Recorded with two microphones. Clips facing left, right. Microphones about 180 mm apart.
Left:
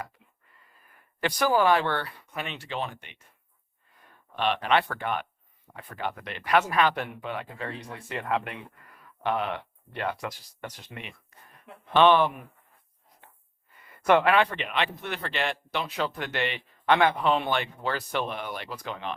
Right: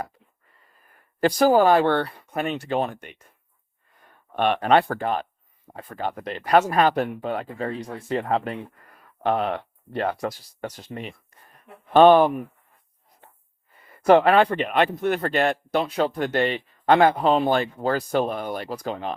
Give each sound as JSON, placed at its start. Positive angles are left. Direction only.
{"t": 1.2, "sound": "speech", "side_deg": -40}
{"t": 4.4, "sound": "speech", "side_deg": -50}
{"t": 14.0, "sound": "speech", "side_deg": -35}